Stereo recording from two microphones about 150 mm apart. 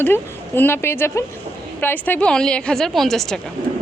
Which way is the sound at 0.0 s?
15° left (ahead or behind).